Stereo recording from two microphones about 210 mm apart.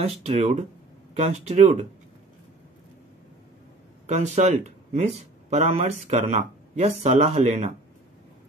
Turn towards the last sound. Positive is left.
turn(degrees=-30)  # may be behind; listen again after turning